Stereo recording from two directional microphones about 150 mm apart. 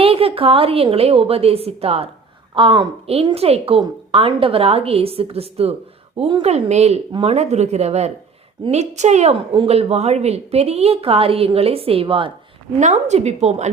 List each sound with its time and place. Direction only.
0.0 s a woman's voice: 40° right (ahead or behind)
12.8 s speech: 50° right (ahead or behind)